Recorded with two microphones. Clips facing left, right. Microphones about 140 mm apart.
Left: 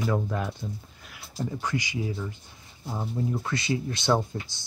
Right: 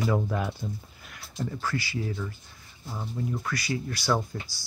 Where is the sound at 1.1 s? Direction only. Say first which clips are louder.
Left 1 dB; centre (ahead or behind).